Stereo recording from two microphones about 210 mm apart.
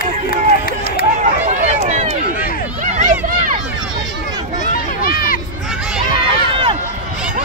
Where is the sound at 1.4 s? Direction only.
35° right (ahead or behind).